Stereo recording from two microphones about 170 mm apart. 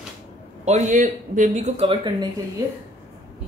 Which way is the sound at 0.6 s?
45° right (ahead or behind).